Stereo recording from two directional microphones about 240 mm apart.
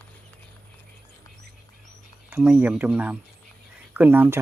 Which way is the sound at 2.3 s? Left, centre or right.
Centre.